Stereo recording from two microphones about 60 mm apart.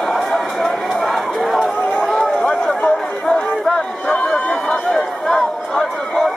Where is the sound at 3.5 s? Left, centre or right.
Centre.